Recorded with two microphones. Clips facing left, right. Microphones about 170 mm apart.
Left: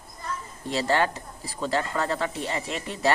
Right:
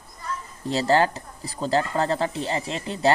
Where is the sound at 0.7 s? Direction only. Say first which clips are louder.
Right 4 dB; 35° right (ahead or behind).